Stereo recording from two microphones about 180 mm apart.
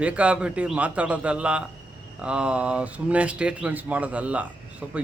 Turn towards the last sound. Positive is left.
turn(degrees=-10)  # may be behind; listen again after turning